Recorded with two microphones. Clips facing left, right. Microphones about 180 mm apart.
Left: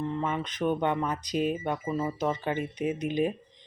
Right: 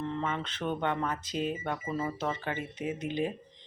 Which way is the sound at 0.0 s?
10° left (ahead or behind).